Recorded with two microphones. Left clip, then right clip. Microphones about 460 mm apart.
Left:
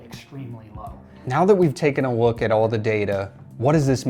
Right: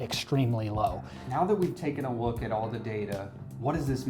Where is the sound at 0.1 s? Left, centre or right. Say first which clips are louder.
Right 9 dB; right.